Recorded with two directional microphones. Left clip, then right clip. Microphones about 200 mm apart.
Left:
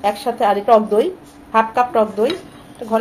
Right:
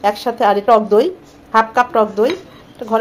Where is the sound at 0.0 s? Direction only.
25° right (ahead or behind).